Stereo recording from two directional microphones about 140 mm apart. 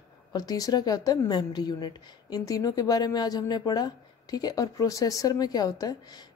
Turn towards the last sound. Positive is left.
turn(degrees=30)  # may be behind; listen again after turning